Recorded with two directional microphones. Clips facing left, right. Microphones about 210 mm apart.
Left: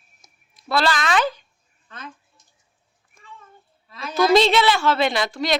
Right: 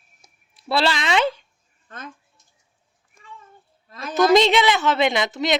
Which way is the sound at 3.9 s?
50° right (ahead or behind).